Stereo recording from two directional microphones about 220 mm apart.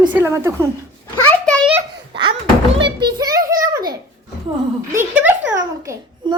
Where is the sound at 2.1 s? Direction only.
20° right (ahead or behind).